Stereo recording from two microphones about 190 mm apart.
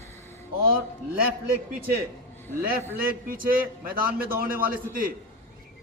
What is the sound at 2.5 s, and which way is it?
A man's voice, 50° right (ahead or behind).